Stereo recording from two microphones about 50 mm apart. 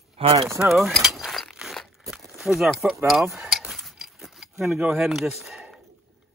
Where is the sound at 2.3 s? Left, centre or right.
Centre.